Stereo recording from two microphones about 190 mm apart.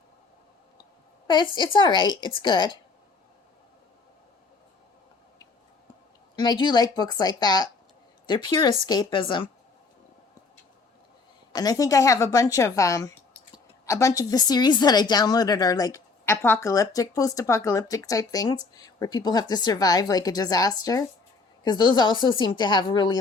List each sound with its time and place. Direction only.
1.3 s a woman's voice: 25° left (ahead or behind)
6.3 s a woman's voice: 20° left (ahead or behind)
11.5 s a woman's voice: 20° left (ahead or behind)